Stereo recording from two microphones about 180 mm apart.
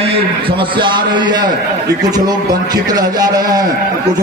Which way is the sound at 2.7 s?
20° right (ahead or behind).